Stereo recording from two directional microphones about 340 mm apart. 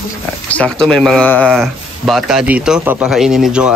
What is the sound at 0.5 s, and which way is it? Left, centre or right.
A man's voice, centre.